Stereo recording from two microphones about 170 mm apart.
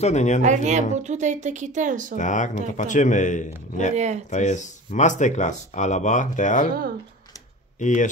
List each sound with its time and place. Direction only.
0.0 s speech: 45° left (ahead or behind)
0.4 s a woman's voice: 45° right (ahead or behind)
2.1 s speech: 45° left (ahead or behind)
3.9 s a woman's voice: 40° right (ahead or behind)
4.3 s speech: 45° left (ahead or behind)
7.8 s speech: 45° left (ahead or behind)